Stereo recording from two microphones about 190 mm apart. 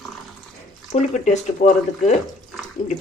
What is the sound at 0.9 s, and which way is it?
Speech, 40° left (ahead or behind).